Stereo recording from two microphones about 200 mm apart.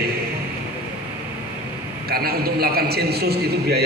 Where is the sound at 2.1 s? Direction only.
50° right (ahead or behind).